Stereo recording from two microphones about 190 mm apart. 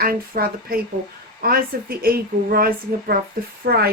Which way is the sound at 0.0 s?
50° right (ahead or behind).